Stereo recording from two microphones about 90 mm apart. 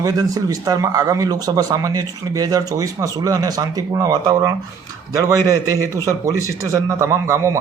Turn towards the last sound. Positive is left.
turn(degrees=-35)  # may be behind; listen again after turning